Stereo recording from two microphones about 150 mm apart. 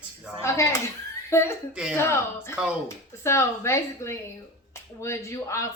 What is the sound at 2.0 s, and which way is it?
A woman's voice, 15° left (ahead or behind).